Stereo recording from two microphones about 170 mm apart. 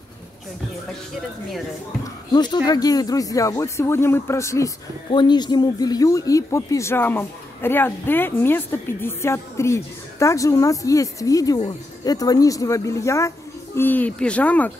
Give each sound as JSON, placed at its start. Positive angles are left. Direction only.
{"t": 2.3, "sound": "speech", "side_deg": 25}